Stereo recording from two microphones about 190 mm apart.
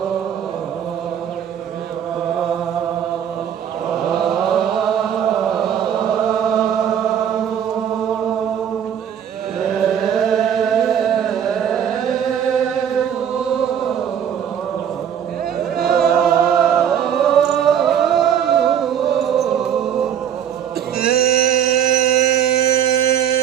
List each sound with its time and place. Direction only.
3.9 s chant: centre (ahead or behind)
9.6 s chant: centre (ahead or behind)
15.8 s chant: centre (ahead or behind)
21.0 s a sound: 55° left (ahead or behind)